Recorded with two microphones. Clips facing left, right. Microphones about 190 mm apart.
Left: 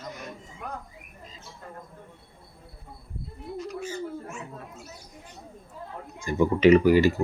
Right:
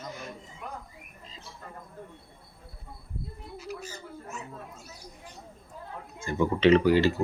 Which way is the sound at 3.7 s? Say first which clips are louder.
Left 9 dB; 40° right (ahead or behind).